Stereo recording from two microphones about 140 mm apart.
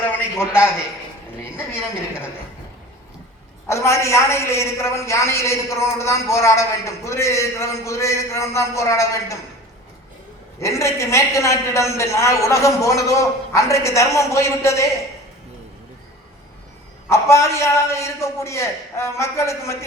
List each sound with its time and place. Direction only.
0.3 s a man's voice: 20° left (ahead or behind)
3.7 s a man's voice: 20° left (ahead or behind)
10.6 s a man's voice: 20° left (ahead or behind)
17.1 s a man's voice: 20° left (ahead or behind)